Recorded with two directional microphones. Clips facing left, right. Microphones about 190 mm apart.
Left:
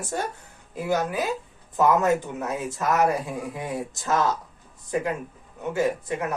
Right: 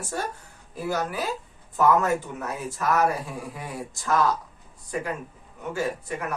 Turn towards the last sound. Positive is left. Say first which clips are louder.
# left 4 dB
turn(degrees=20)  # may be behind; listen again after turning